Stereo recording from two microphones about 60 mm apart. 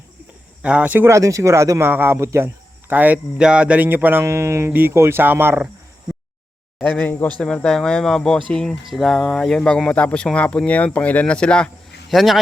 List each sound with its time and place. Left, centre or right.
0.6 s speech: right
1.0 s speech: right
1.8 s speech: right
2.1 s speech: right
2.9 s speech: right
3.3 s speech: centre
3.8 s speech: right
4.3 s speech: right
4.7 s speech: right
7.0 s speech: left
7.3 s speech: centre
8.8 s speech: centre; by 11.3 s left
11.3 s speech: centre
12.0 s speech: centre